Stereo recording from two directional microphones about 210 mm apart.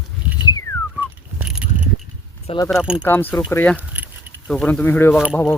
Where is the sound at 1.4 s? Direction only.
5° right (ahead or behind).